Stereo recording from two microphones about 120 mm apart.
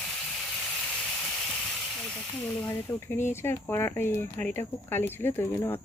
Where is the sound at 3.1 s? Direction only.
20° left (ahead or behind).